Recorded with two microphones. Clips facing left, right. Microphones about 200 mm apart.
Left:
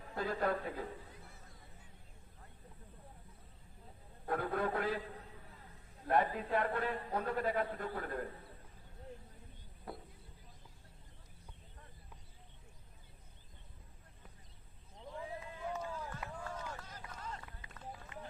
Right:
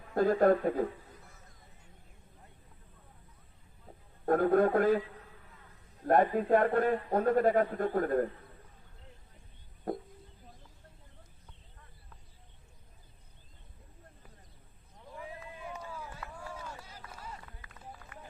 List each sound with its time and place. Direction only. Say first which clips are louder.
0.1 s a man's voice: right 11 dB; 50° right (ahead or behind)
4.3 s a man's voice: right 11 dB; 50° right (ahead or behind)
6.1 s a man's voice: right 8 dB; 50° right (ahead or behind)
9.9 s a man's voice: right 12 dB; 45° right (ahead or behind)
15.3 s run: left 3 dB; 15° right (ahead or behind)
18.1 s run: left 2 dB; 20° left (ahead or behind)